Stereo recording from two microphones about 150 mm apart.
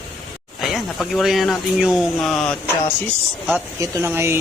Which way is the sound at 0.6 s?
Centre (ahead or behind).